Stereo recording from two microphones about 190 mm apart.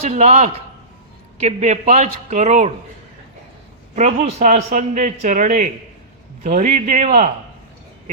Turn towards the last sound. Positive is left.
turn(degrees=-35)  # may be behind; listen again after turning